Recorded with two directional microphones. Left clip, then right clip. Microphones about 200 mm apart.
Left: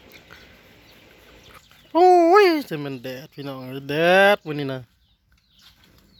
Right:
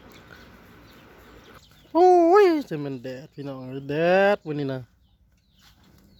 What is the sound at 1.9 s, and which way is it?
A child's voice, 5° left (ahead or behind).